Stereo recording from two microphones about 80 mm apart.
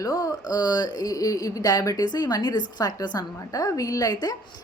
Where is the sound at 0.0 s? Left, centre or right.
Left.